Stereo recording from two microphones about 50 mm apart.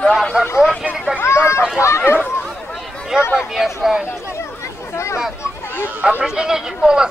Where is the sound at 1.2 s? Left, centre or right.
Left.